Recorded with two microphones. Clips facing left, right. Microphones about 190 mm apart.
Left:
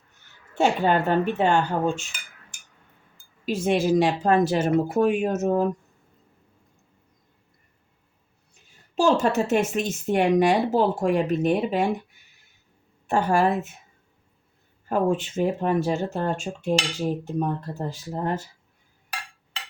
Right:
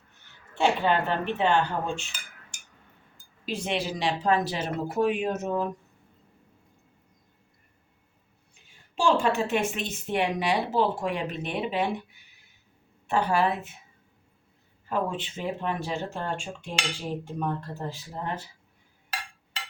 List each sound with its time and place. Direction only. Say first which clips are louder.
0.5 s a woman's voice: left 3 dB; 45° left (ahead or behind)
3.4 s a woman's voice: left 8 dB; 45° left (ahead or behind)
9.0 s a woman's voice: left 3 dB; 40° left (ahead or behind)
13.1 s a woman's voice: left 3 dB; 45° left (ahead or behind)
14.8 s a woman's voice: left 7 dB; 45° left (ahead or behind)